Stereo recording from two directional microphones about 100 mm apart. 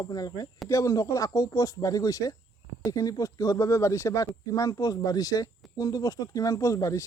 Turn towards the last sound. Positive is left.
turn(degrees=30)  # may be behind; listen again after turning